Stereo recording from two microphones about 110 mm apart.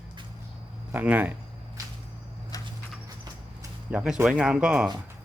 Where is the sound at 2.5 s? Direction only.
35° left (ahead or behind).